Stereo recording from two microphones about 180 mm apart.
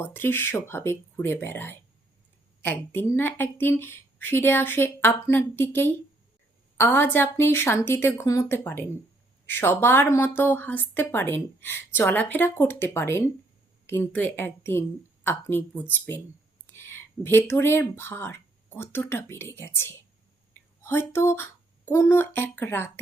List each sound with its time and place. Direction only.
0.0 s a woman's voice: 10° left (ahead or behind)